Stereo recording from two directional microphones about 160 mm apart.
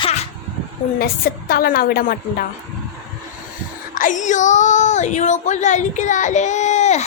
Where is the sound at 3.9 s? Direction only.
55° left (ahead or behind).